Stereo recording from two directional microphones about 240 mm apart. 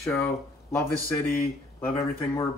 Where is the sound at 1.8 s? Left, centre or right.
Centre.